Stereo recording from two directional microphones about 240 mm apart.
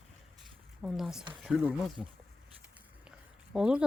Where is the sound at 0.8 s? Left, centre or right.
Centre.